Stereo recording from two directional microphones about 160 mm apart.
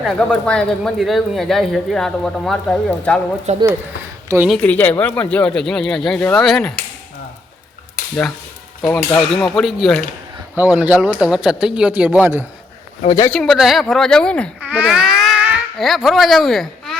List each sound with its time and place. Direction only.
0.0 s speech: 5° left (ahead or behind)
3.5 s speech: 45° right (ahead or behind)
4.4 s speech: 5° left (ahead or behind)
8.8 s speech: 5° left (ahead or behind)
10.6 s speech: 10° right (ahead or behind)
13.3 s speech: 5° left (ahead or behind)
14.7 s speech: 5° right (ahead or behind)